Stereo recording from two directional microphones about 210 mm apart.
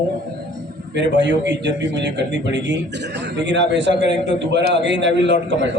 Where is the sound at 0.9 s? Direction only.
55° right (ahead or behind).